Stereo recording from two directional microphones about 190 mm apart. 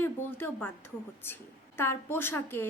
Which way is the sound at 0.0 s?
10° left (ahead or behind).